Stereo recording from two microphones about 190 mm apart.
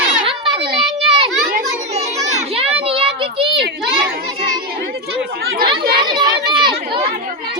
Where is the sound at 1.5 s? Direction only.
45° right (ahead or behind).